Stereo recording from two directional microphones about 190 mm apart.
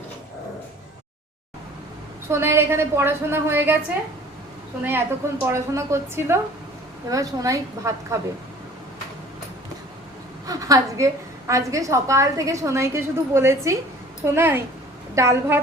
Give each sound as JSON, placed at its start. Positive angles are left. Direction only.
{"t": 2.3, "sound": "a woman's voice", "side_deg": -15}
{"t": 4.8, "sound": "a woman's voice", "side_deg": -10}
{"t": 10.4, "sound": "a woman's voice", "side_deg": -20}